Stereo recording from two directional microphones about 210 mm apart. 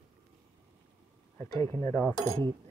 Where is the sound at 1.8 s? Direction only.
5° left (ahead or behind).